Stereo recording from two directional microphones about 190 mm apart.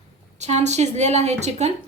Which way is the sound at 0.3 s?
35° right (ahead or behind).